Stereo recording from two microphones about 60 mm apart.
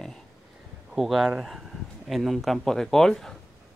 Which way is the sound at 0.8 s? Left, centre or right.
Centre.